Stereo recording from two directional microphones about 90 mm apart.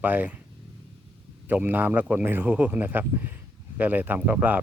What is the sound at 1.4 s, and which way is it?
A man's voice, 20° right (ahead or behind).